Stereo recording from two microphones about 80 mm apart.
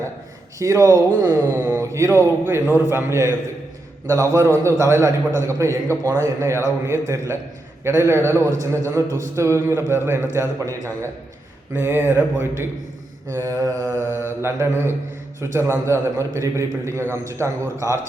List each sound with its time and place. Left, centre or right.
0.6 s a man's voice: right
13.3 s a man's voice: right